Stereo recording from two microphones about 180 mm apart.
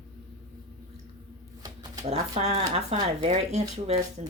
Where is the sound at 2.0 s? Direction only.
35° right (ahead or behind).